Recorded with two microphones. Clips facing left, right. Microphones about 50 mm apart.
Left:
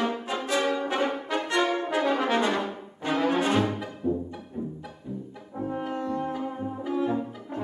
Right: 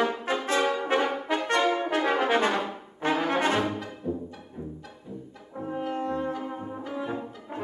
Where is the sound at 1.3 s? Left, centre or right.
Right.